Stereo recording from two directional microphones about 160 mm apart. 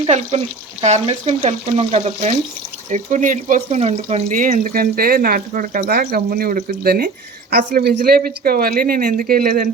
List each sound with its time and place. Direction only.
0.0 s speech: 40° right (ahead or behind); by 9.6 s 65° right (ahead or behind)